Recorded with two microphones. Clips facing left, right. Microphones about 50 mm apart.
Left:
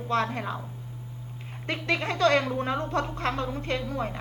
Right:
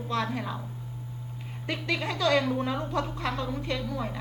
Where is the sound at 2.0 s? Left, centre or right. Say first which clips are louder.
Left 2 dB; left.